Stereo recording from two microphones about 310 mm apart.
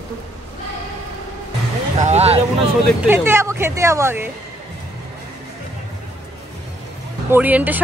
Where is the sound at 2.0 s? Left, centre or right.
Centre.